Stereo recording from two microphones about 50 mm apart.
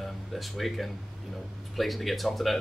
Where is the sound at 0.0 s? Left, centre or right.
Centre.